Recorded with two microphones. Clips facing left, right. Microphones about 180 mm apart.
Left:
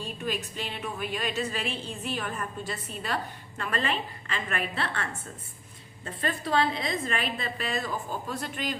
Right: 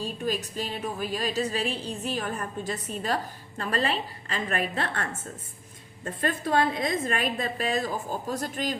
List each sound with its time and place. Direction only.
0.0 s a woman's voice: 35° right (ahead or behind)
6.1 s a woman's voice: 50° right (ahead or behind)